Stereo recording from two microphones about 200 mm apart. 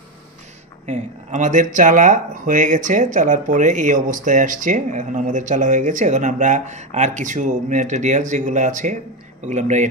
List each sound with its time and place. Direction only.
0.8 s speech: 35° right (ahead or behind)